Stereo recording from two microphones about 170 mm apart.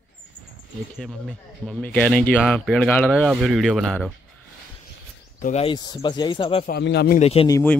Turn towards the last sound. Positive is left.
turn(degrees=15)  # may be behind; listen again after turning